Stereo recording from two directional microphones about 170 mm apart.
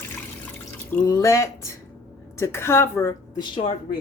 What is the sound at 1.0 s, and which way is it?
A woman's voice, 15° left (ahead or behind).